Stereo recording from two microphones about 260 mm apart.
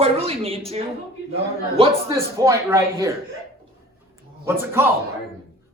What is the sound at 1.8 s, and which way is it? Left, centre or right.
Speech, centre.